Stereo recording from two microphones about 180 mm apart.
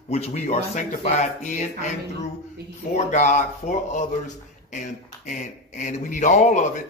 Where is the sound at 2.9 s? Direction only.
45° left (ahead or behind).